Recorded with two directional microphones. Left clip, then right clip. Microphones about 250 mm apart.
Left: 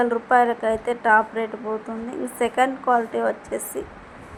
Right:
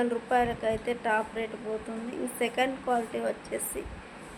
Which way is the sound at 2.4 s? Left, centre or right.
Centre.